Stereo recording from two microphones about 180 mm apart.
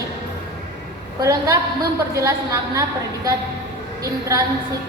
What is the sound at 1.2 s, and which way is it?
Speech, 20° right (ahead or behind).